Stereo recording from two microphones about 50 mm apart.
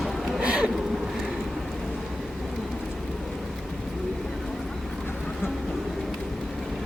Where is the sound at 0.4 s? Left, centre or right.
Centre.